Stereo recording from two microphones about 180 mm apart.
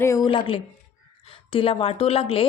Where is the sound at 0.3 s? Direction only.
30° left (ahead or behind).